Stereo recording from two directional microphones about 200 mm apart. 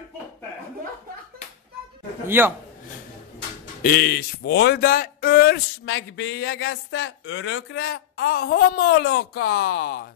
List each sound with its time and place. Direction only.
2.2 s a man's voice: 10° right (ahead or behind)
3.8 s speech: 50° left (ahead or behind)
5.9 s speech: 65° left (ahead or behind); by 10.0 s 50° left (ahead or behind)